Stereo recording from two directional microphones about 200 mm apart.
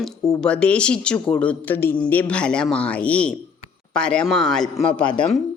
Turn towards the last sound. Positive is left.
turn(degrees=5)  # may be behind; listen again after turning